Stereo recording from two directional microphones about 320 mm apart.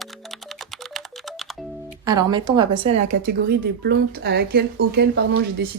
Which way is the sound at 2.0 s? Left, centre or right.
Centre.